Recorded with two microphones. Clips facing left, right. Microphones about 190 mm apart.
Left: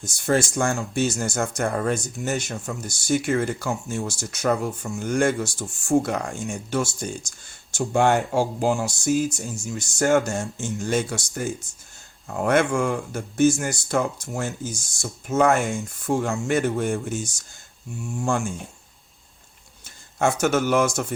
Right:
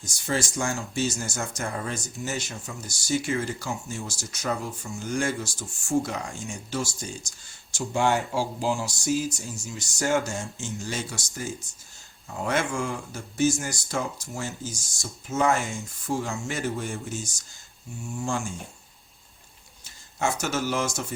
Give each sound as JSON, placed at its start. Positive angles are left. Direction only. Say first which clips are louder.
{"t": 0.0, "sound": "speech", "louder": "left 7 dB", "side_deg": 55}
{"t": 19.8, "sound": "speech", "louder": "left 6 dB", "side_deg": 55}